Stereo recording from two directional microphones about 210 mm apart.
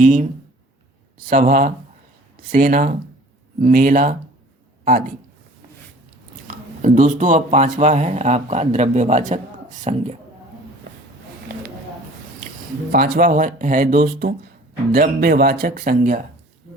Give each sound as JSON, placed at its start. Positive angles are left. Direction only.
{"t": 0.0, "sound": "speech", "side_deg": -35}
{"t": 1.3, "sound": "speech", "side_deg": -40}
{"t": 6.8, "sound": "speech", "side_deg": -35}
{"t": 12.9, "sound": "speech", "side_deg": -45}